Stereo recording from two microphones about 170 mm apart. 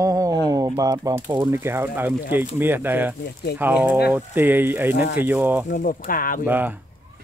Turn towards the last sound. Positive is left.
turn(degrees=-10)  # may be behind; listen again after turning